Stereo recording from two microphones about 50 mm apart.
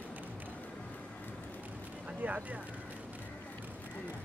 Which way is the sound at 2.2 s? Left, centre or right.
Right.